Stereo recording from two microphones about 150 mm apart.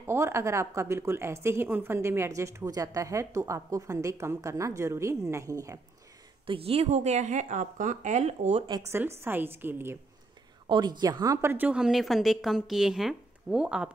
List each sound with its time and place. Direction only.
0.0 s a woman's voice: 15° right (ahead or behind)
6.4 s speech: 40° right (ahead or behind)
8.6 s a woman's voice: 30° right (ahead or behind)
9.2 s a woman's voice: 15° right (ahead or behind)
10.7 s a woman's voice: 30° right (ahead or behind)
11.5 s speech: 10° right (ahead or behind)